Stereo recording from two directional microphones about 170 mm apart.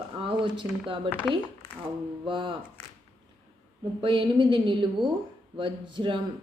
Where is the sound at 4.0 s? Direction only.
30° right (ahead or behind).